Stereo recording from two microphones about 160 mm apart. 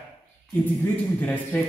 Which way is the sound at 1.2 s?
10° left (ahead or behind).